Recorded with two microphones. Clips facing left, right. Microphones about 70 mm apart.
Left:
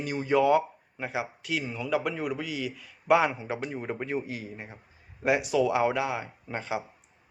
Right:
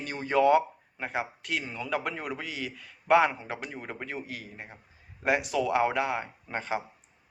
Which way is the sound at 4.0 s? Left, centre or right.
Centre.